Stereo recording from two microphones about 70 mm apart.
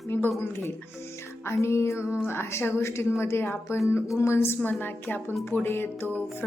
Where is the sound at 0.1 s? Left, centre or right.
Left.